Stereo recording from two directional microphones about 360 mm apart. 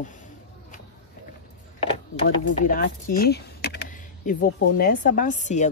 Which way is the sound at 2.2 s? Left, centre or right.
Left.